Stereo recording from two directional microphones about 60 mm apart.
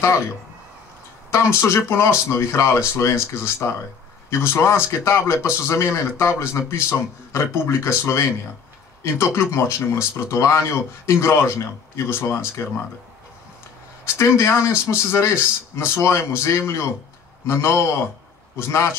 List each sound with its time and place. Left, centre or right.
1.3 s a man's voice: left
14.0 s a man's voice: left